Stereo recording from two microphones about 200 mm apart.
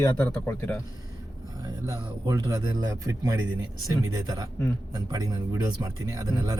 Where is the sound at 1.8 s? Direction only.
15° right (ahead or behind).